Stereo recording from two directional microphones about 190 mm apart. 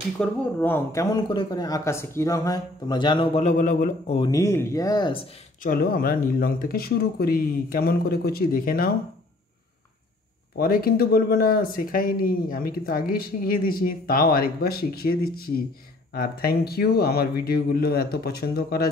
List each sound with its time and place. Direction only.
0.2 s speech: 10° left (ahead or behind); by 4.2 s 45° left (ahead or behind)
4.2 s speech: 15° left (ahead or behind)
5.6 s speech: 50° left (ahead or behind)
10.6 s speech: 50° left (ahead or behind)